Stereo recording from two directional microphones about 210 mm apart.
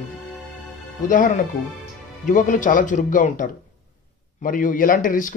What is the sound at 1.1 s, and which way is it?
Speech, 40° left (ahead or behind).